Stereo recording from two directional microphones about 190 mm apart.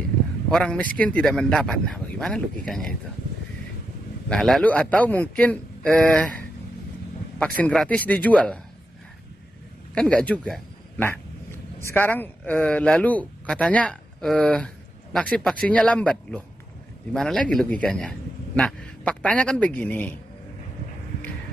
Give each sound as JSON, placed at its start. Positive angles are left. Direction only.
{"t": 0.5, "sound": "speech", "side_deg": 5}
{"t": 4.3, "sound": "speech", "side_deg": 0}
{"t": 7.3, "sound": "speech", "side_deg": 5}
{"t": 9.9, "sound": "speech", "side_deg": 5}